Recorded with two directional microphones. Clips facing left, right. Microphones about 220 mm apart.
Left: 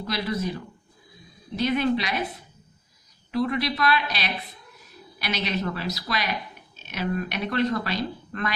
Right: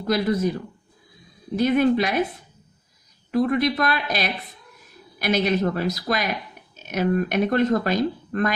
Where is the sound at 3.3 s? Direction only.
50° right (ahead or behind).